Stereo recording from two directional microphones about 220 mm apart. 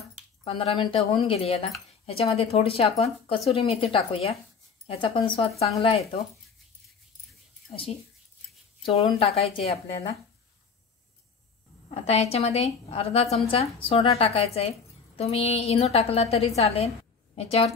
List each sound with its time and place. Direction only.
0.4 s speech: 25° left (ahead or behind)
7.7 s speech: 25° left (ahead or behind)
9.2 s speech: 25° left (ahead or behind)
11.9 s speech: 30° left (ahead or behind)